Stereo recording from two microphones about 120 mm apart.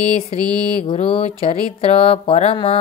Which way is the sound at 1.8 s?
55° left (ahead or behind).